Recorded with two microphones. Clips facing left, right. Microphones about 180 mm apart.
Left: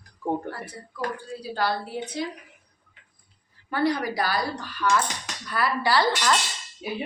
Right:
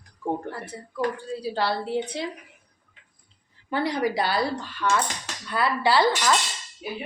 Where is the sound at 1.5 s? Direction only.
25° right (ahead or behind).